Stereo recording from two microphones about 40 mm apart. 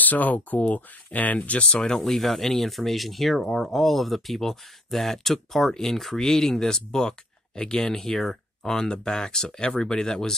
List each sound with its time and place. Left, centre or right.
0.0 s speech: left
2.0 s speech: centre
8.6 s speech: centre